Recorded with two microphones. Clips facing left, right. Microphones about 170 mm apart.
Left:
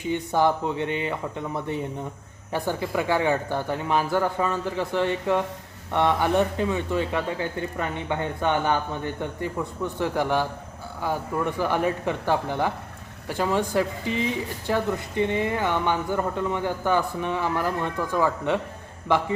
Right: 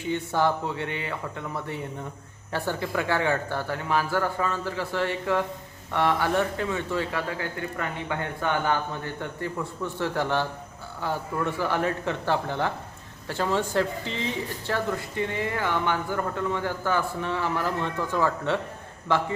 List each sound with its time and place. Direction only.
0.1 s speech: 15° left (ahead or behind)